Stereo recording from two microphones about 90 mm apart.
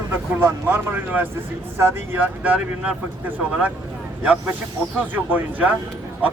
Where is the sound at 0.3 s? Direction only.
20° right (ahead or behind).